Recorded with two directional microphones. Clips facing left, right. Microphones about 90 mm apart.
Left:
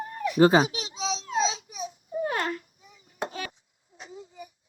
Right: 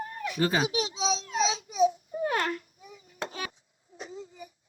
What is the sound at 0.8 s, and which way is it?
Baby cry, 20° right (ahead or behind).